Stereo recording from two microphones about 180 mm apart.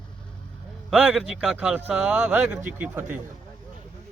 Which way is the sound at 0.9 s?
5° right (ahead or behind).